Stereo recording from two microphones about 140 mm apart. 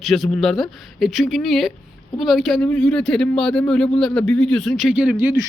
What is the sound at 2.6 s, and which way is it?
A man's voice, 10° left (ahead or behind).